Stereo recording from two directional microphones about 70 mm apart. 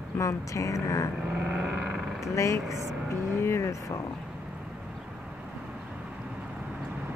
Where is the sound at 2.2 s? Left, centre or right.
Left.